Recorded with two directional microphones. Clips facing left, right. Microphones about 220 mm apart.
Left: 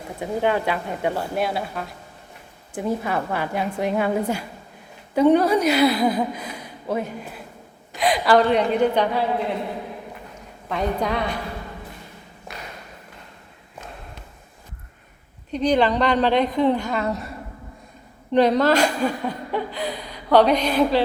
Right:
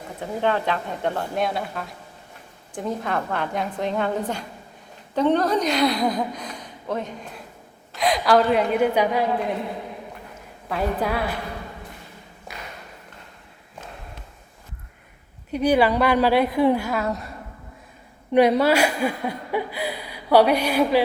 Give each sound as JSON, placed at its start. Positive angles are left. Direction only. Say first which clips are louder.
{"t": 0.2, "sound": "a woman's voice", "louder": "left 2 dB", "side_deg": 10}
{"t": 10.7, "sound": "a woman's voice", "louder": "even", "side_deg": -5}
{"t": 15.5, "sound": "speech", "louder": "even", "side_deg": -10}
{"t": 18.3, "sound": "speech", "louder": "even", "side_deg": -10}